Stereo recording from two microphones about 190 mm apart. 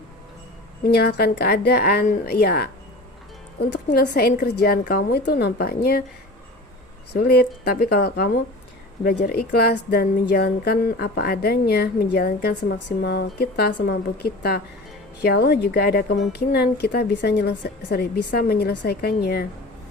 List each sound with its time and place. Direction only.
0.9 s speech: 55° left (ahead or behind)
4.1 s speech: 50° left (ahead or behind)
7.2 s speech: 55° left (ahead or behind)